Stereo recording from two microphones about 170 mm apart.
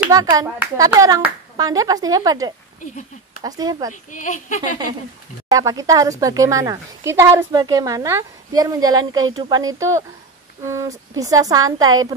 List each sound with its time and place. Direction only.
0.1 s speech: 20° right (ahead or behind)
3.9 s speech: 50° left (ahead or behind)
5.5 s speech: 20° right (ahead or behind)